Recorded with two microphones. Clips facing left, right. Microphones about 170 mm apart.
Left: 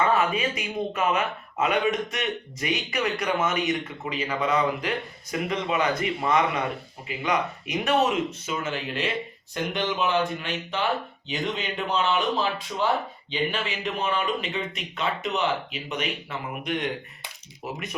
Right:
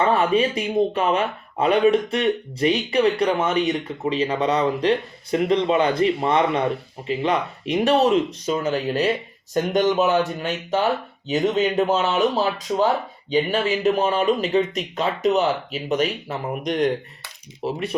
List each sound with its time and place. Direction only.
0.0 s speech: 30° right (ahead or behind)